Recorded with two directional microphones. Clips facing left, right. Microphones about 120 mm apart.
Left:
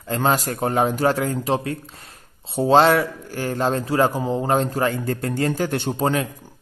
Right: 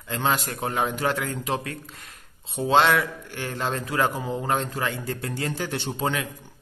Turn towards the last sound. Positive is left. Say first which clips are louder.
# left 6 dB
turn(degrees=40)  # may be behind; listen again after turning